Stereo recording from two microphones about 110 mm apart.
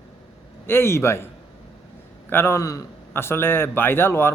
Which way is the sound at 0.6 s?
20° left (ahead or behind).